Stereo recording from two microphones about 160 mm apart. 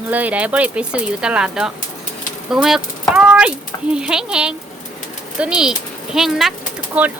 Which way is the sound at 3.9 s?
5° right (ahead or behind).